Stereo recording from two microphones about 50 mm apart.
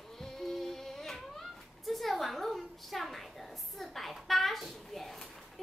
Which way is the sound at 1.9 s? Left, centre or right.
Centre.